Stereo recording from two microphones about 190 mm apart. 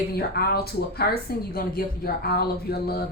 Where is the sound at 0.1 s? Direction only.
55° left (ahead or behind).